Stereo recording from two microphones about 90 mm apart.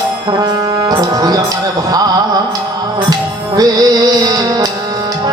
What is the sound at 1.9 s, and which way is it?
Carnatic music, 45° right (ahead or behind).